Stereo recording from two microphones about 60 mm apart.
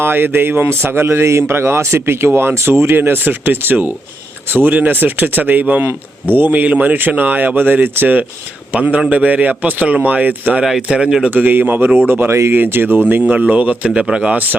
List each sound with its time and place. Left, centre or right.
0.0 s speech: right
3.0 s a man's voice: right
10.6 s speech: centre
11.3 s speech: right
13.2 s a man's voice: right